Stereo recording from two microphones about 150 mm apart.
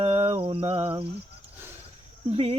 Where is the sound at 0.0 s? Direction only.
40° right (ahead or behind).